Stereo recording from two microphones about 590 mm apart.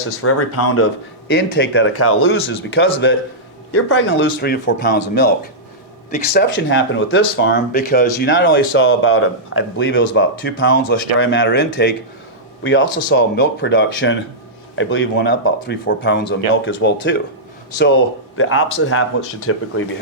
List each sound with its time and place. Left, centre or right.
0.2 s speech: left
6.3 s speech: centre
18.3 s speech: left